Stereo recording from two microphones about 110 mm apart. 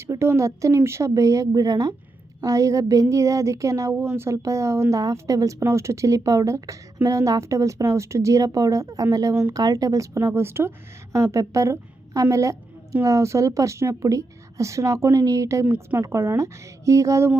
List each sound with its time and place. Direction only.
0.1 s speech: 25° right (ahead or behind)
15.6 s speech: 15° right (ahead or behind)
16.0 s speech: 25° right (ahead or behind)